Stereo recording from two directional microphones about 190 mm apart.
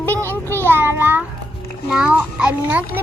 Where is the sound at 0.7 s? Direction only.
10° right (ahead or behind).